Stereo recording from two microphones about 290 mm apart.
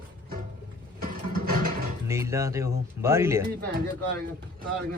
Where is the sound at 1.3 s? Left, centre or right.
Right.